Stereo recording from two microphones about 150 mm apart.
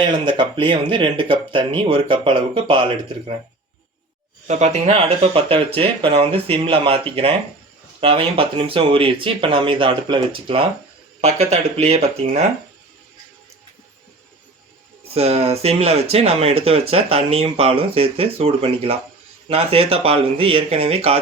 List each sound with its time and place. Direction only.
0.0 s speech: 30° right (ahead or behind)
4.4 s speech: 50° right (ahead or behind)
8.0 s speech: 40° right (ahead or behind)
11.2 s speech: 45° right (ahead or behind)
15.1 s speech: 45° right (ahead or behind)